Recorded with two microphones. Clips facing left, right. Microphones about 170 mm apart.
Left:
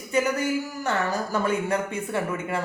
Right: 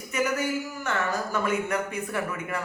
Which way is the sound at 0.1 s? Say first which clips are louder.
Left 4 dB; 30° left (ahead or behind).